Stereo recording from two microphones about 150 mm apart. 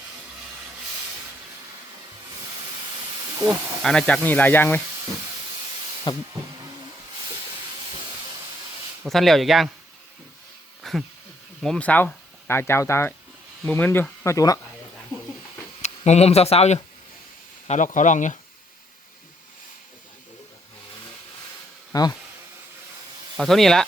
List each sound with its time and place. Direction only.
3.4 s speech: 5° left (ahead or behind)
6.1 s a sound: 30° left (ahead or behind)
9.0 s speech: centre (ahead or behind)
10.8 s a sound: centre (ahead or behind)
11.6 s speech: 5° left (ahead or behind); by 14.6 s 20° left (ahead or behind)
15.8 s speech: 45° left (ahead or behind)
17.7 s speech: 55° left (ahead or behind)
21.9 s speech: 25° left (ahead or behind)
23.4 s speech: centre (ahead or behind)